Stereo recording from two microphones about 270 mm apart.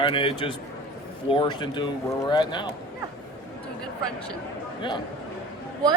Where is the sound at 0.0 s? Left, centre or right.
Centre.